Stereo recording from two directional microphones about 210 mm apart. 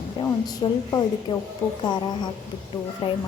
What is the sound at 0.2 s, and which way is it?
A woman's voice, 20° left (ahead or behind).